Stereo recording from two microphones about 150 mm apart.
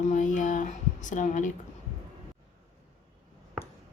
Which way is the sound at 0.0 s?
55° left (ahead or behind).